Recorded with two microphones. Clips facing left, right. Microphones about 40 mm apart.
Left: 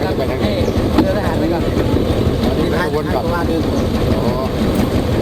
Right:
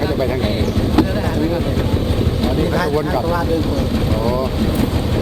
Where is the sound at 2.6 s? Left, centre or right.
Left.